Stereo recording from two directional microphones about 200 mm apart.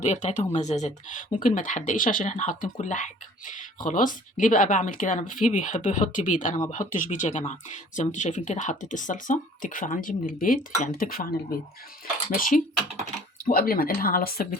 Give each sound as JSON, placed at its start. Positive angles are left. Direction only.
{"t": 0.0, "sound": "speech", "side_deg": 35}
{"t": 12.5, "sound": "speech", "side_deg": 40}